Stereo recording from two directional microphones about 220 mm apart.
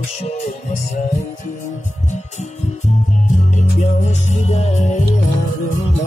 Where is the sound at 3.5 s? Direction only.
30° left (ahead or behind).